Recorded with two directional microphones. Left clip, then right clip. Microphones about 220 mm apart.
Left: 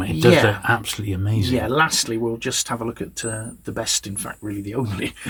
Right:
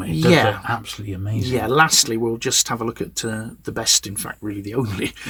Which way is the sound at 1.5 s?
40° right (ahead or behind).